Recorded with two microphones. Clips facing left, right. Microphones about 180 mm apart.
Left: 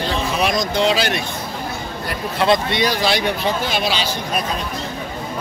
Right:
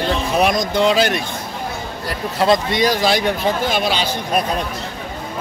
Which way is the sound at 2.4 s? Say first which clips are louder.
Right 2 dB; 40° right (ahead or behind).